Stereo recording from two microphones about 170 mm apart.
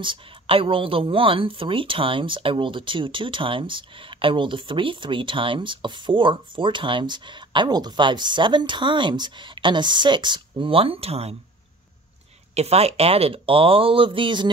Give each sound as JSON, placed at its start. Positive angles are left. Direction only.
{"t": 0.0, "sound": "speech", "side_deg": -30}
{"t": 12.5, "sound": "speech", "side_deg": -40}